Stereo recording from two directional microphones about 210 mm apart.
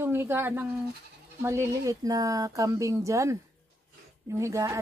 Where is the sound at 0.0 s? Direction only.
10° right (ahead or behind).